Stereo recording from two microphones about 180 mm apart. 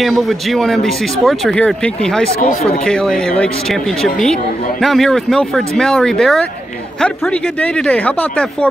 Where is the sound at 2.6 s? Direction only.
35° left (ahead or behind).